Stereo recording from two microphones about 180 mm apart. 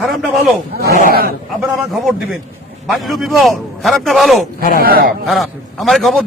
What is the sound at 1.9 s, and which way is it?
Speech, centre (ahead or behind).